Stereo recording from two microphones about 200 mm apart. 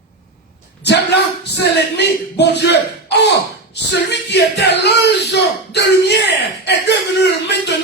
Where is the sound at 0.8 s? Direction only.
55° left (ahead or behind).